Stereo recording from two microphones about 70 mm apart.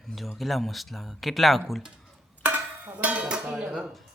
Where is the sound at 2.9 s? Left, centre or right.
Centre.